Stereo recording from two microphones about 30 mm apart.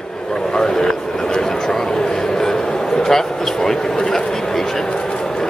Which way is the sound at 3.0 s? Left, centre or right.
Centre.